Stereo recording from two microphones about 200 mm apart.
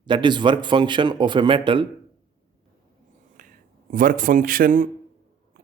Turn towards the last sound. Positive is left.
turn(degrees=-55)  # may be behind; listen again after turning